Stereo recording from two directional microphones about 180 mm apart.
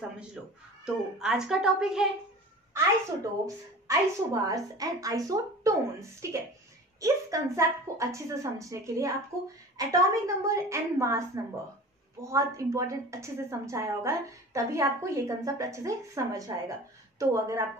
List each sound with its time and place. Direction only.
0.4 s a woman's voice: 5° right (ahead or behind)
3.4 s a woman's voice: 20° right (ahead or behind)